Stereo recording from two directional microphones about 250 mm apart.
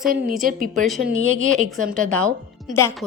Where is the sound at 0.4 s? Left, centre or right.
Right.